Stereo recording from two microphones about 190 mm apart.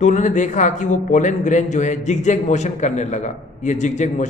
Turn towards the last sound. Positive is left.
turn(degrees=40)  # may be behind; listen again after turning